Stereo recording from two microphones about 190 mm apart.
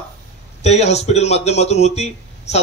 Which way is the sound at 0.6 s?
35° left (ahead or behind).